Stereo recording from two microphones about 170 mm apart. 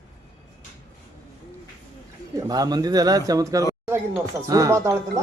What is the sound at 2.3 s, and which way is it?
Speech, 20° right (ahead or behind).